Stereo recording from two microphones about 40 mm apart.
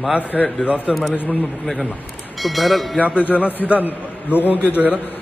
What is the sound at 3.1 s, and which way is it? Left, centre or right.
Speech, left.